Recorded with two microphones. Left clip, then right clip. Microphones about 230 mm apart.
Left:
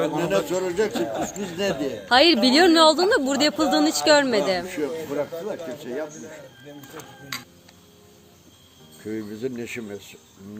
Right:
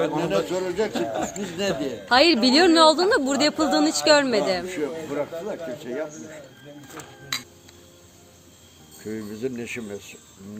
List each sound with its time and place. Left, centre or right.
0.2 s a man's voice: left
0.9 s speech: centre
1.5 s a woman's voice: centre
6.9 s cutlery: right
9.0 s speech: centre